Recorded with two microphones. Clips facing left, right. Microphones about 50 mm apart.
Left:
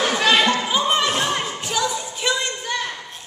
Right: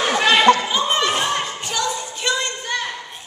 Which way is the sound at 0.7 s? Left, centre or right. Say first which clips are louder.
Even; centre.